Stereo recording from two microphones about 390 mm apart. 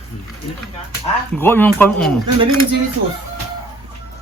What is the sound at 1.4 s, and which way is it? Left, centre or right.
Speech, centre.